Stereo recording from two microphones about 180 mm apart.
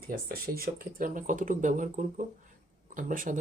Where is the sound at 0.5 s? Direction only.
55° right (ahead or behind).